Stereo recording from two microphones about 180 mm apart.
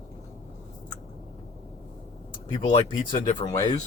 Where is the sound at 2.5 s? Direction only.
25° left (ahead or behind).